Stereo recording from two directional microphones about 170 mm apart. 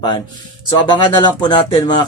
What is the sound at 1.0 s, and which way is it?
Speech, 25° left (ahead or behind).